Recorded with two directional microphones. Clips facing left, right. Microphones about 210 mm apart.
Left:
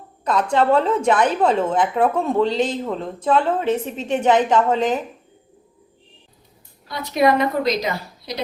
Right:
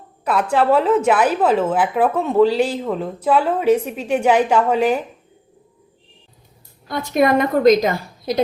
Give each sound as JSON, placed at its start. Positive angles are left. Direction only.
{"t": 0.3, "sound": "a woman's voice", "side_deg": -5}
{"t": 6.8, "sound": "a woman's voice", "side_deg": -50}